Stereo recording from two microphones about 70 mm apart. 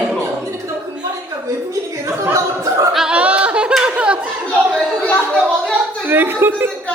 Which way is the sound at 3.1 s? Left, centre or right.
Centre.